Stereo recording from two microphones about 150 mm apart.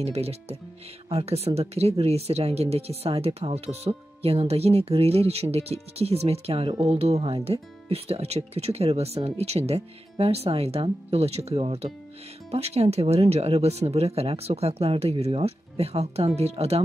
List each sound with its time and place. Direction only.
0.0 s speech: 45° right (ahead or behind)